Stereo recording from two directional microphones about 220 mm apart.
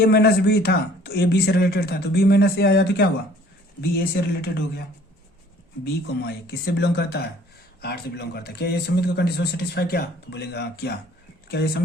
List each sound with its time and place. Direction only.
0.0 s a man's voice: 50° left (ahead or behind)
5.8 s a man's voice: 45° left (ahead or behind)